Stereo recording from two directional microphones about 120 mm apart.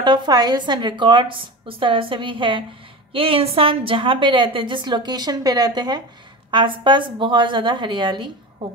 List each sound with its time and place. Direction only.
0.0 s a woman's voice: 40° right (ahead or behind)